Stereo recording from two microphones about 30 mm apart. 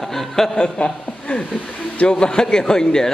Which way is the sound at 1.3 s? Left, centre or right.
Left.